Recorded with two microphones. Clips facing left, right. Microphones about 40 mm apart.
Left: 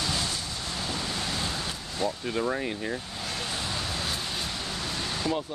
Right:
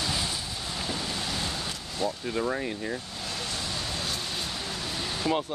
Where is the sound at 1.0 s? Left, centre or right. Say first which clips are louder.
Left 1 dB; centre.